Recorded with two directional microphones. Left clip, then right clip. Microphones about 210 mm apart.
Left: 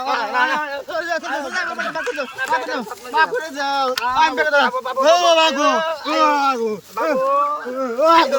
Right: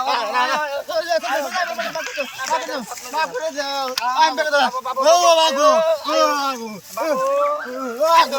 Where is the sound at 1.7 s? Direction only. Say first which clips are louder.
Left 1 dB; 50° left (ahead or behind).